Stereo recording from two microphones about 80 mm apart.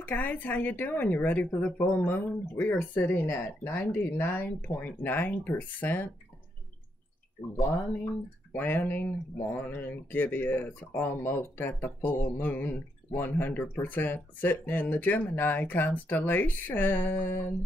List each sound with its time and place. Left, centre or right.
0.0 s speech: left
8.5 s speech: left